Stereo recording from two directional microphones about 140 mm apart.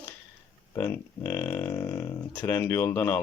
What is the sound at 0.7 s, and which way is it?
Speech, 20° left (ahead or behind).